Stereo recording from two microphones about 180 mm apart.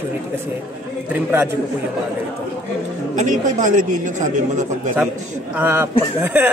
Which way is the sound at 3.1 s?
45° right (ahead or behind).